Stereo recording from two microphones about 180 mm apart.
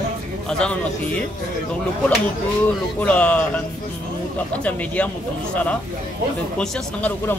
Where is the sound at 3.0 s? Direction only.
5° left (ahead or behind).